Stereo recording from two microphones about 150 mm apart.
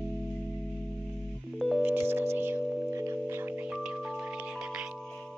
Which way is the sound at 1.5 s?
Centre (ahead or behind).